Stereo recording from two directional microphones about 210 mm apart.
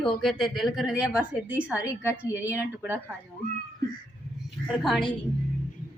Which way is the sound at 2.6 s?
10° right (ahead or behind).